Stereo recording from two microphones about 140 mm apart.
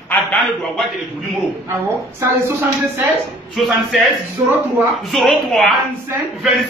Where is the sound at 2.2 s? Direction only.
20° right (ahead or behind).